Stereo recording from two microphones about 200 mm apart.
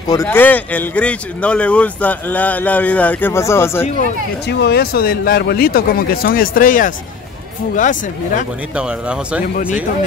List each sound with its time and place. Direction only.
0.1 s speech: 15° left (ahead or behind)
4.5 s speech: 55° left (ahead or behind); by 8.5 s 40° left (ahead or behind)
8.7 s speech: 5° right (ahead or behind)